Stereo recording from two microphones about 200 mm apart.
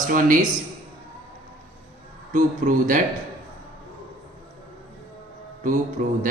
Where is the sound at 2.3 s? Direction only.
40° right (ahead or behind).